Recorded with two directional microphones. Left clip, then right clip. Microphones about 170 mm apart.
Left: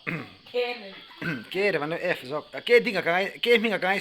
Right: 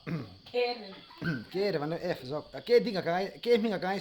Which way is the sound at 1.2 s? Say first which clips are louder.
Left 6 dB; 10° left (ahead or behind).